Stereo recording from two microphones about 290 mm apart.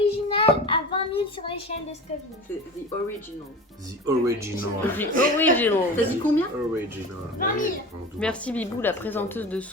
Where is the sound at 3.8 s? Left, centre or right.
Centre.